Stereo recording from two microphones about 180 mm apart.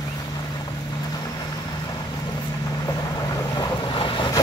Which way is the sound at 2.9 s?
20° left (ahead or behind).